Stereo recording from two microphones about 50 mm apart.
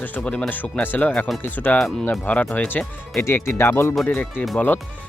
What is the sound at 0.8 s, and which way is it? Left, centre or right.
Speech, left.